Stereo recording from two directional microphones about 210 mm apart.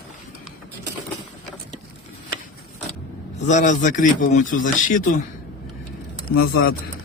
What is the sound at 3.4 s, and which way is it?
A man's voice, 35° left (ahead or behind).